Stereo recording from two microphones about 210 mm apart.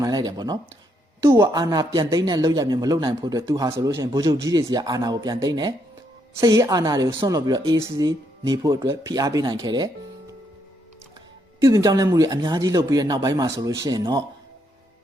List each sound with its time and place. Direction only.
0.0 s speech: 20° right (ahead or behind)
11.6 s speech: 15° right (ahead or behind)